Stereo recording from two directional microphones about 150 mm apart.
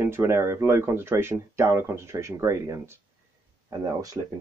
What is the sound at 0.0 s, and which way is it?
Speech, 15° right (ahead or behind).